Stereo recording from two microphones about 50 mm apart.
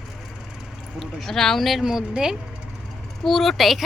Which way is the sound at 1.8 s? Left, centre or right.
Centre.